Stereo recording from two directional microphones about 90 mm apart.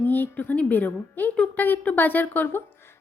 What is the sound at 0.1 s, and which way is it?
A woman's voice, 20° left (ahead or behind).